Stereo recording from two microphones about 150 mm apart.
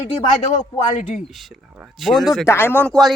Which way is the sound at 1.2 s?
Centre (ahead or behind).